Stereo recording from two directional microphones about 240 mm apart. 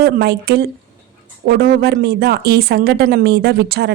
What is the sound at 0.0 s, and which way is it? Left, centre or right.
Speech, right.